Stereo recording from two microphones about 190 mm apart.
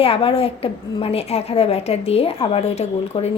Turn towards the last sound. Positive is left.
turn(degrees=30)  # may be behind; listen again after turning